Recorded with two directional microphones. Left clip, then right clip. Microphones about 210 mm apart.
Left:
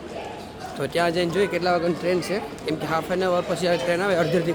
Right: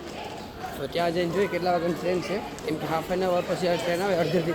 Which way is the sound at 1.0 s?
20° left (ahead or behind).